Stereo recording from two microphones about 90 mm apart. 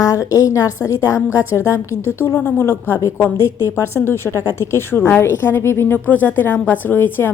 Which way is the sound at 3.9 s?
25° left (ahead or behind).